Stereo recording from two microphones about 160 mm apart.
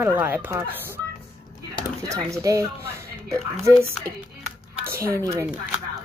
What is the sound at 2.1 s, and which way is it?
Speech, 20° right (ahead or behind).